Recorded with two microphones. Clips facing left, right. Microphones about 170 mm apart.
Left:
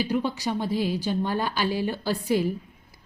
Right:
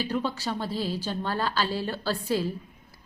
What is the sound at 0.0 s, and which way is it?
A woman's voice, 15° left (ahead or behind).